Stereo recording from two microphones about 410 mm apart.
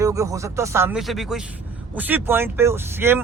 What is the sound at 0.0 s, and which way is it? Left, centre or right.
Speech, centre.